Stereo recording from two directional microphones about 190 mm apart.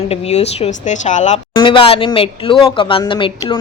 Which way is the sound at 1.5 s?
25° left (ahead or behind).